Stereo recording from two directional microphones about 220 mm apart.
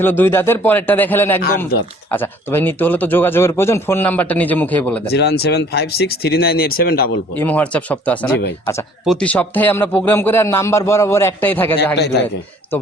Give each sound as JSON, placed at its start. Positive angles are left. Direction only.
{"t": 0.0, "sound": "a man's voice", "side_deg": 10}
{"t": 5.1, "sound": "speech", "side_deg": 50}
{"t": 7.3, "sound": "a man's voice", "side_deg": 5}
{"t": 11.9, "sound": "speech", "side_deg": 50}